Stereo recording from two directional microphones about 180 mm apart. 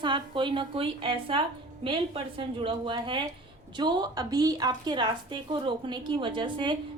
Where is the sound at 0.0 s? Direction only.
25° right (ahead or behind).